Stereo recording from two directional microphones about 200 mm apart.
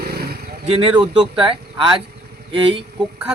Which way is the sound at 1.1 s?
25° right (ahead or behind).